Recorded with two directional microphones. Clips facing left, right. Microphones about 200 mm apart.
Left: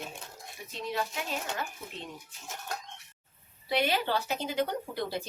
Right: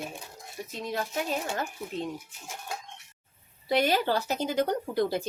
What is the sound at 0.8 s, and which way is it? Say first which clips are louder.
Speech: right 3 dB; 45° right (ahead or behind).